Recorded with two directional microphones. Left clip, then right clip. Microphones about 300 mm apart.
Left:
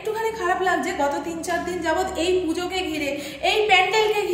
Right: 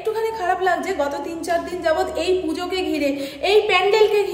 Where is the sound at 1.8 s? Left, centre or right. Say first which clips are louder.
Right 2 dB; centre.